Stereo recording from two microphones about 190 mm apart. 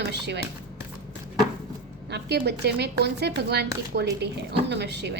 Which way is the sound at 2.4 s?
60° right (ahead or behind).